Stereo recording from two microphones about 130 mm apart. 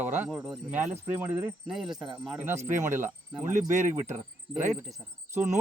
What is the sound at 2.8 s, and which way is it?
Speech, 15° right (ahead or behind).